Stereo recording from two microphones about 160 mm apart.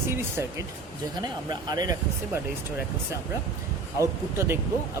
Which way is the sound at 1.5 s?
25° right (ahead or behind).